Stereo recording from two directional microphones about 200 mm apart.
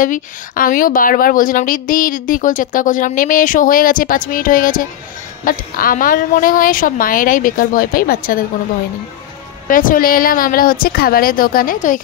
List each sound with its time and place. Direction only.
0.0 s a woman's voice: 40° left (ahead or behind)
9.7 s a woman's voice: 45° left (ahead or behind)